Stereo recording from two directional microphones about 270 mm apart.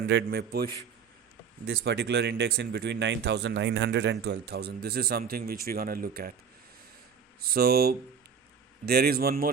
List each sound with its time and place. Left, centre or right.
0.1 s speech: right
7.5 s speech: right